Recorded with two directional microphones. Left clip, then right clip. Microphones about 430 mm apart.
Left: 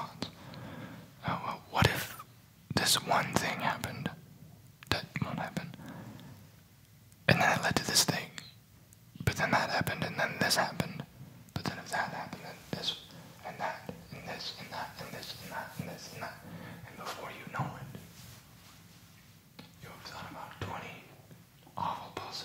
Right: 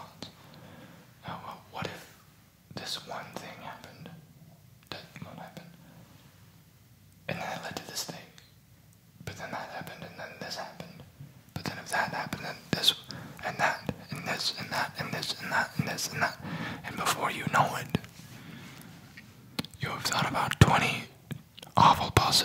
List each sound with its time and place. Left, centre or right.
0.2 s a sound: left
2.7 s whispering: left
7.2 s whispering: left
11.5 s whispering: centre
12.3 s whispering: right
17.9 s whispering: right
19.5 s whispering: right
21.7 s whispering: right